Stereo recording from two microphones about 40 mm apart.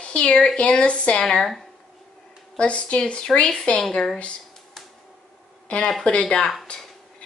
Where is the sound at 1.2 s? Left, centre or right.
Centre.